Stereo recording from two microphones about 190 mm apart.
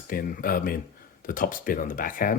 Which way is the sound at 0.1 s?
50° left (ahead or behind).